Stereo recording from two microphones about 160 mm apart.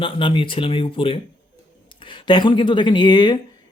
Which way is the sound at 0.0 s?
30° left (ahead or behind).